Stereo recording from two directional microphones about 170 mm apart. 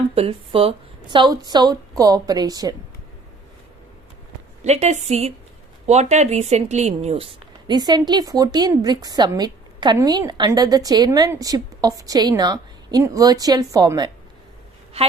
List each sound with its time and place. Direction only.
0.1 s speech: 35° right (ahead or behind)
4.6 s a woman's voice: 40° right (ahead or behind); by 14.1 s 25° right (ahead or behind)